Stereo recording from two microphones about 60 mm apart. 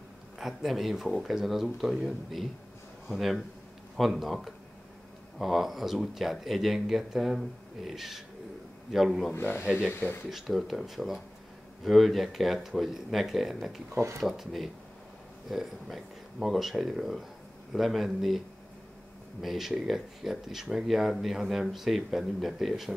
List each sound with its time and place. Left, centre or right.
0.4 s speech: centre
9.3 s speech: left
10.3 s speech: centre
19.4 s speech: centre